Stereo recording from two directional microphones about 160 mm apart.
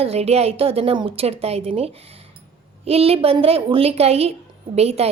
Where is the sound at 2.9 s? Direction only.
40° right (ahead or behind).